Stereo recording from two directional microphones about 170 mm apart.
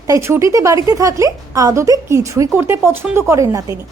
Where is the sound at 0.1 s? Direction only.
15° right (ahead or behind).